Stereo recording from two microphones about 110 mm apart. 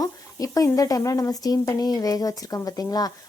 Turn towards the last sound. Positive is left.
turn(degrees=35)  # may be behind; listen again after turning